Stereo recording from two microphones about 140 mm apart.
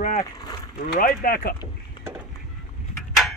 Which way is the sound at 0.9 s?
90° left.